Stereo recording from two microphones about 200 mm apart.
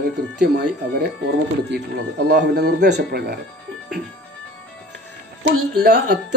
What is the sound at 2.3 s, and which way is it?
Speech, 55° right (ahead or behind).